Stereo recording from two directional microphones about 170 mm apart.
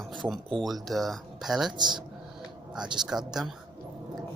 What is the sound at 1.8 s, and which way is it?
Speech, 25° right (ahead or behind).